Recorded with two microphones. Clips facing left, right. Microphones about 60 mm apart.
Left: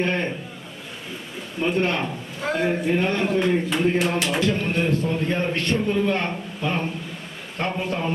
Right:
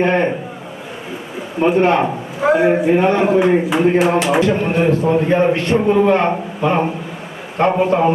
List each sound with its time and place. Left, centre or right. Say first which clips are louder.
0.0 s a man's voice: right 9 dB; right
1.5 s a man's voice: right 9 dB; centre